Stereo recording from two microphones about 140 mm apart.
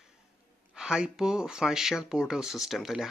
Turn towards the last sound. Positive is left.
turn(degrees=0)  # may be behind; listen again after turning